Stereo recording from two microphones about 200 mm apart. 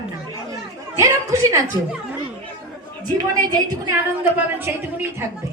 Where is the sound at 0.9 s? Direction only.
15° right (ahead or behind).